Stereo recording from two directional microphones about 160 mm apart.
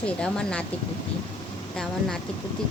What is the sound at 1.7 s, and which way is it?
Speech, 5° left (ahead or behind).